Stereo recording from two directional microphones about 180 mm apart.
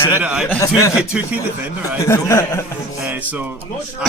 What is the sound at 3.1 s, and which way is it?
Music, 10° right (ahead or behind).